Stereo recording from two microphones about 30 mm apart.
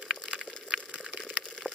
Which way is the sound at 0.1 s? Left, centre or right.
Right.